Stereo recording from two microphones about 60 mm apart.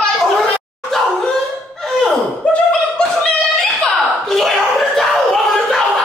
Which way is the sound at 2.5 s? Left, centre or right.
Left.